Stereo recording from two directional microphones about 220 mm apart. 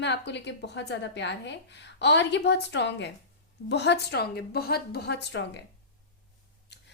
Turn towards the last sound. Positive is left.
turn(degrees=50)  # may be behind; listen again after turning